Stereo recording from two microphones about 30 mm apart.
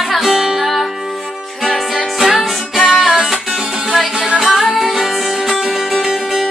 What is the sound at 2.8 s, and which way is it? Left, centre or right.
Music, centre.